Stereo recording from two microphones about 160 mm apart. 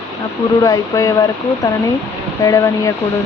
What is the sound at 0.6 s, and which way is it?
Speech, 20° left (ahead or behind).